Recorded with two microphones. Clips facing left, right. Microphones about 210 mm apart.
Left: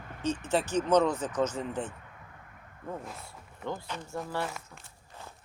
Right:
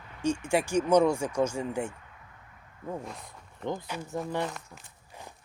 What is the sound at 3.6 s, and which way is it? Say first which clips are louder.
Speech: right 3 dB; 15° right (ahead or behind).